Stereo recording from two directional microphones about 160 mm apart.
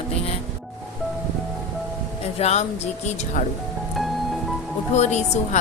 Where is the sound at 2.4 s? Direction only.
45° left (ahead or behind).